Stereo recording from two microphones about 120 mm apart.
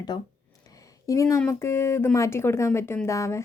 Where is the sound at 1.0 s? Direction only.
25° left (ahead or behind).